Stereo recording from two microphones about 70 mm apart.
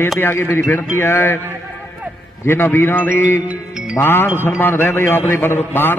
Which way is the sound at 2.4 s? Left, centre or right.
Left.